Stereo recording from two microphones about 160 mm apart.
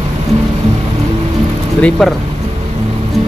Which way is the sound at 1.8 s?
Centre (ahead or behind).